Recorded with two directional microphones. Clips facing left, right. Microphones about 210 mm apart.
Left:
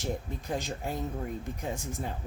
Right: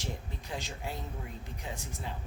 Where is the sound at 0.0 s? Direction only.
45° left (ahead or behind).